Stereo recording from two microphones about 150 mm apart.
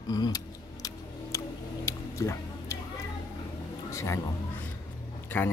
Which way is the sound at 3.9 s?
20° left (ahead or behind).